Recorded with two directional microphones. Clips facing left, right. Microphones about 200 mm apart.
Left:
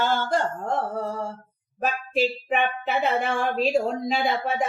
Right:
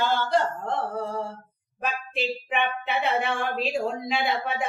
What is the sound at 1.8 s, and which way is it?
Speech, 40° left (ahead or behind).